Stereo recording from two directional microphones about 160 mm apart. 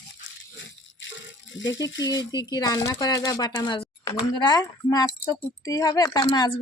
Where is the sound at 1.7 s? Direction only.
20° left (ahead or behind).